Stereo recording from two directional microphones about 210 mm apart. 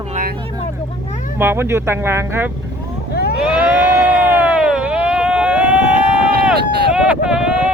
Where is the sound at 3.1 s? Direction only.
50° left (ahead or behind).